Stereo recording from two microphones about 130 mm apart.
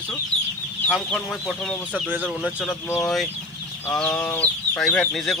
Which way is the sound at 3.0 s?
Centre (ahead or behind).